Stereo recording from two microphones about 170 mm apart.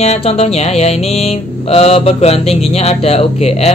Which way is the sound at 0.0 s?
40° left (ahead or behind).